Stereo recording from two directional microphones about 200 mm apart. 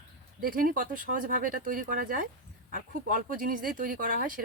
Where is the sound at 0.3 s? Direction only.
45° right (ahead or behind).